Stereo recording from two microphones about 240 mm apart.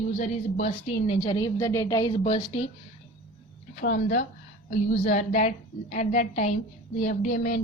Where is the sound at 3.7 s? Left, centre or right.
Left.